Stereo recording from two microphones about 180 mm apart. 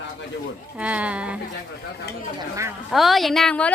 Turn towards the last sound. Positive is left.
turn(degrees=5)  # may be behind; listen again after turning